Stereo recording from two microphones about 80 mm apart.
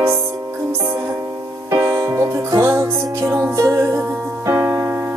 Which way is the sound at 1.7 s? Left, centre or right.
Right.